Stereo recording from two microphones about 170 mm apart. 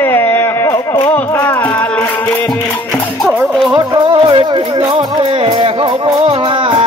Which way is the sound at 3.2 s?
Centre (ahead or behind).